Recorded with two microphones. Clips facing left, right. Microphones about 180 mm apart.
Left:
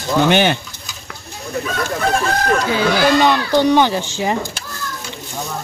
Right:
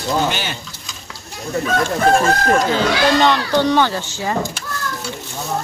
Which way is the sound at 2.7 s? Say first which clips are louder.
Left 1 dB; 10° left (ahead or behind).